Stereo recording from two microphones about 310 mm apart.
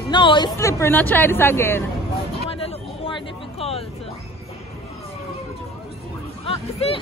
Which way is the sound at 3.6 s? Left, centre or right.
Centre.